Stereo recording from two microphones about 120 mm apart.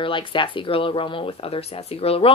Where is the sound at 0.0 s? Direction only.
45° left (ahead or behind).